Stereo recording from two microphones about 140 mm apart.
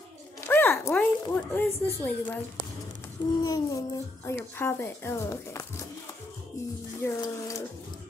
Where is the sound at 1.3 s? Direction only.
15° left (ahead or behind).